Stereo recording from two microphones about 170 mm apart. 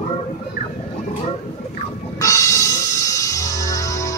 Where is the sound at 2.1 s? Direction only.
20° left (ahead or behind).